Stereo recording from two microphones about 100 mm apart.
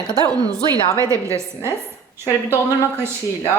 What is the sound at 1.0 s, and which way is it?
Speech, 30° right (ahead or behind).